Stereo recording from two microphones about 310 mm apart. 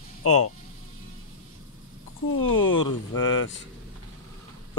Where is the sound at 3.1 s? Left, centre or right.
Left.